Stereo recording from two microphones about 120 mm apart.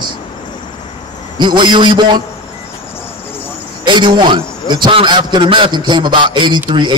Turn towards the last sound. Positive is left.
turn(degrees=-40)  # may be behind; listen again after turning